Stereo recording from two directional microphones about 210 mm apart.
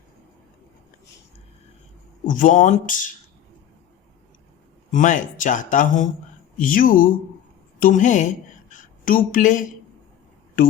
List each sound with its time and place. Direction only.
2.2 s speech: 40° left (ahead or behind)
4.9 s speech: 40° left (ahead or behind)
8.7 s a sound: 40° left (ahead or behind)